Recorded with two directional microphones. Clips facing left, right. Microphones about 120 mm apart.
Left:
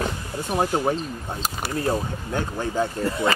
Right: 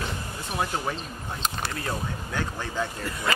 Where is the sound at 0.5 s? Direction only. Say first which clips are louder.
Left 7 dB; 35° left (ahead or behind).